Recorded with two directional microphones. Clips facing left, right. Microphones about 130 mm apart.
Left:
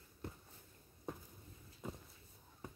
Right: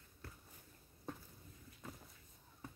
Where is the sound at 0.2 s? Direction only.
20° left (ahead or behind).